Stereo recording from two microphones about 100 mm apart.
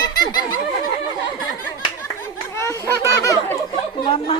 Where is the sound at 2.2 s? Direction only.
30° left (ahead or behind).